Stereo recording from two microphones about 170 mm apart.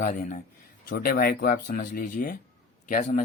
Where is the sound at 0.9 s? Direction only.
60° left (ahead or behind).